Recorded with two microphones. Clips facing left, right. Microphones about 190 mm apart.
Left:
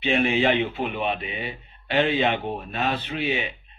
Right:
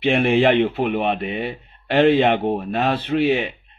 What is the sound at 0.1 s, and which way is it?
Speech, 55° right (ahead or behind).